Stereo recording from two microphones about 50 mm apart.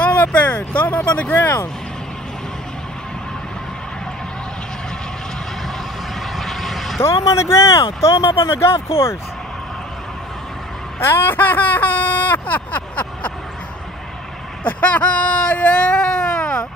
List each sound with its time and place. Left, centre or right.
0.0 s speech: left
1.3 s speech: left
6.3 s vehicle: centre
7.0 s speech: left
11.0 s a sound: left
14.8 s whimper: left